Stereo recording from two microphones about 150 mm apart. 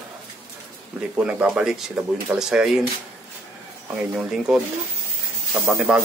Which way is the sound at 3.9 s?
5° right (ahead or behind).